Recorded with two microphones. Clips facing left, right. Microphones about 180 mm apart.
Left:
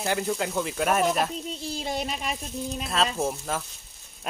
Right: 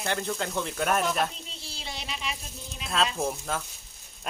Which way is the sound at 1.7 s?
45° left (ahead or behind).